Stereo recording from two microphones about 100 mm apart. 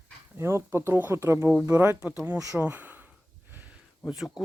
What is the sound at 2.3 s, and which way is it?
Speech, 35° right (ahead or behind).